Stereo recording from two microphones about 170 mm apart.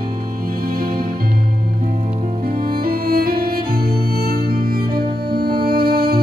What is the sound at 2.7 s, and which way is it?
Music, 60° right (ahead or behind).